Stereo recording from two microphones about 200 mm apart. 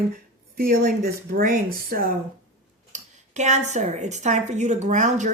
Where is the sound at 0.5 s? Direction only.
50° right (ahead or behind).